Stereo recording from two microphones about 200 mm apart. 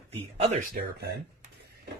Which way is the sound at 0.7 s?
55° right (ahead or behind).